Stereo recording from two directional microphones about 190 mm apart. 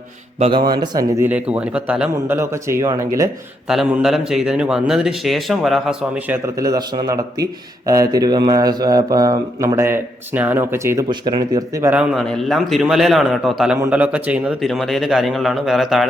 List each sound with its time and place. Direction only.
0.3 s a man's voice: 35° right (ahead or behind)
0.6 s a man's voice: 20° right (ahead or behind)
3.7 s speech: 5° right (ahead or behind)
12.1 s speech: centre (ahead or behind)
13.7 s speech: 10° right (ahead or behind)